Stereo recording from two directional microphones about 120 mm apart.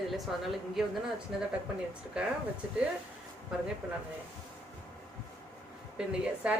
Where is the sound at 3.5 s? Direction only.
5° right (ahead or behind).